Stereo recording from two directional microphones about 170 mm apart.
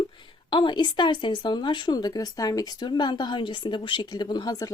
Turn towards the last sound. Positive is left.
turn(degrees=20)  # may be behind; listen again after turning